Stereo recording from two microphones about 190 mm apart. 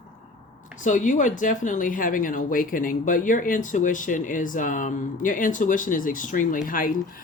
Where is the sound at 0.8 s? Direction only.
40° left (ahead or behind).